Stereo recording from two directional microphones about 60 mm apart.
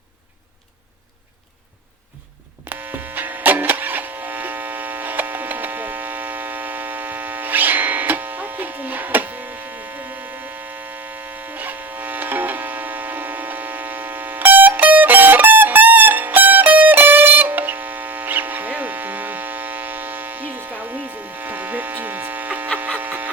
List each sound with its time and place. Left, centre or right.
2.6 s electric shaver: right
11.5 s a sound: right
21.3 s hum: right